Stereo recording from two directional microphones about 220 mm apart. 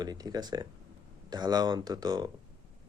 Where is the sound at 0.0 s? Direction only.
15° right (ahead or behind).